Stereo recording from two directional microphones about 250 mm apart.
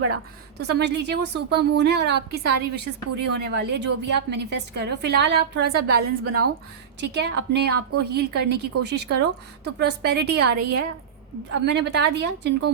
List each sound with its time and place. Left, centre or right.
0.6 s a woman's voice: right
6.2 s speech: right
7.0 s a woman's voice: right